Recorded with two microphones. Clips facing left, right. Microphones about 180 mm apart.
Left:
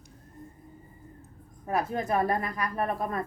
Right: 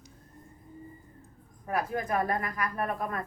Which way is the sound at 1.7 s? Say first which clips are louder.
Left 2 dB; 25° left (ahead or behind).